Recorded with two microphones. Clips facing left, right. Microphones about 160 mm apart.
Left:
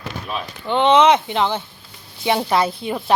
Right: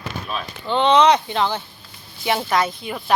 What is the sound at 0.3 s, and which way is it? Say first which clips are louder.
Speech: left 2 dB; 15° left (ahead or behind).